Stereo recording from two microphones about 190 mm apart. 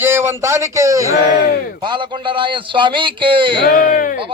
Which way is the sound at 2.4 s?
25° right (ahead or behind).